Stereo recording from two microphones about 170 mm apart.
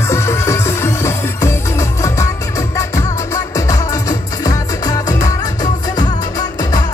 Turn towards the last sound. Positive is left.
turn(degrees=25)  # may be behind; listen again after turning